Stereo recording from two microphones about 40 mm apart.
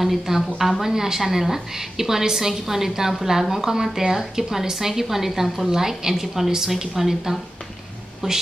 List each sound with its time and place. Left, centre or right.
0.0 s a woman's voice: centre